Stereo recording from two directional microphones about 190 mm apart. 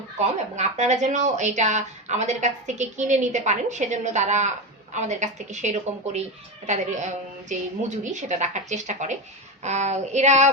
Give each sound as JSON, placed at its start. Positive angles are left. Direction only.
{"t": 0.5, "sound": "speech", "side_deg": -35}